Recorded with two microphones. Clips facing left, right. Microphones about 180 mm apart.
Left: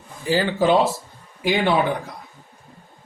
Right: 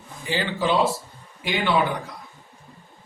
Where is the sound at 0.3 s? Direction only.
45° left (ahead or behind).